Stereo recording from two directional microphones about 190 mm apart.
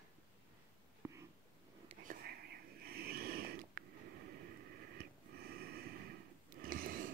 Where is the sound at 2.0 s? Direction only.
55° right (ahead or behind).